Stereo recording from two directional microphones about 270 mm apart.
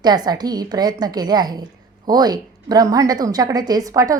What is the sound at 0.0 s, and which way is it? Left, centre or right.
A woman's voice, centre.